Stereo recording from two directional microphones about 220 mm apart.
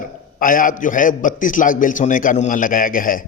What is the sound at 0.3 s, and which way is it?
Speech, 40° left (ahead or behind).